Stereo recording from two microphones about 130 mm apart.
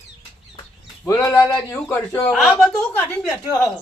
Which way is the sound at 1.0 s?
20° left (ahead or behind).